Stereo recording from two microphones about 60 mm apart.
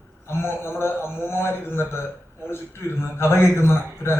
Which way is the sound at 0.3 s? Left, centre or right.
Left.